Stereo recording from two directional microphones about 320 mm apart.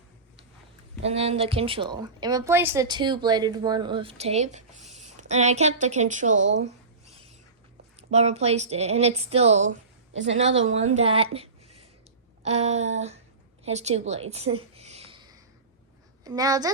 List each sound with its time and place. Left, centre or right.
1.0 s a woman's voice: centre
7.9 s speech: centre
13.7 s a sound: centre
16.2 s a woman's voice: centre